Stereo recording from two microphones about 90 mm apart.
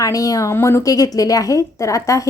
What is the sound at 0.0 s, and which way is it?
A woman's voice, 40° left (ahead or behind).